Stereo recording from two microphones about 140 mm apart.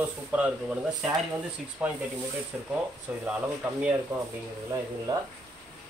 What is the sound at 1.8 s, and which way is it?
Speech, 10° right (ahead or behind).